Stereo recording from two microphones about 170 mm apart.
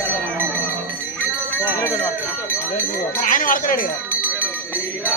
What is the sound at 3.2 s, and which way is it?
Speech, 50° left (ahead or behind).